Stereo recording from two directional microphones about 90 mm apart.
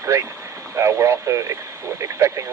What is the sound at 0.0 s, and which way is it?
Speech, 30° right (ahead or behind).